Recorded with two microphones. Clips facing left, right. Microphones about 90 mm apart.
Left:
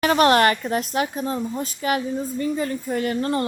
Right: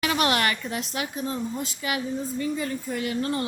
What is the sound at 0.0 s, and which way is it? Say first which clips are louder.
A woman's voice: left 8 dB; 40° left (ahead or behind).